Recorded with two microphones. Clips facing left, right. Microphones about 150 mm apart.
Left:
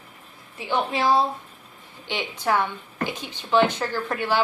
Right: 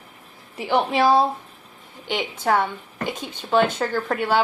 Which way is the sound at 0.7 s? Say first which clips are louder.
Right 4 dB; 60° right (ahead or behind).